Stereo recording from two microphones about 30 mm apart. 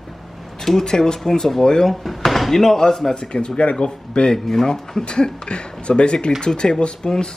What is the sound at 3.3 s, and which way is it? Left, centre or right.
Speech, left.